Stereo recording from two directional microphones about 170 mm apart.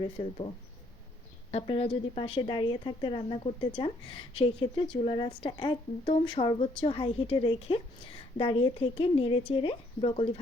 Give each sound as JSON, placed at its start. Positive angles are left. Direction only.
{"t": 1.5, "sound": "speech", "side_deg": 35}